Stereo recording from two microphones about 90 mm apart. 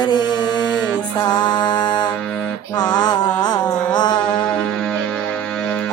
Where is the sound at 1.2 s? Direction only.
55° left (ahead or behind).